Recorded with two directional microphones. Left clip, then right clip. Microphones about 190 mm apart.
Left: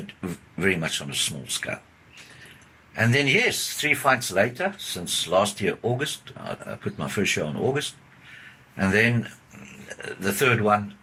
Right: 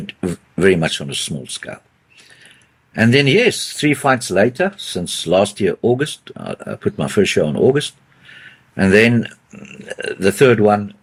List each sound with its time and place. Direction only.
0.1 s speech: 45° right (ahead or behind)
2.9 s speech: 45° right (ahead or behind)